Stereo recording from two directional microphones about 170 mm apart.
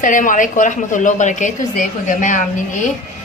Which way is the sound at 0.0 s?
50° left (ahead or behind).